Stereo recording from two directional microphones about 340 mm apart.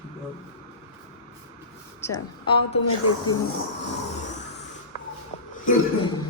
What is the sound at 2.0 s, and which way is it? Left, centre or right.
Speech, centre.